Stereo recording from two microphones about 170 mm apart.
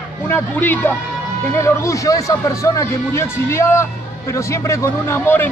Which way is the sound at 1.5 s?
15° left (ahead or behind).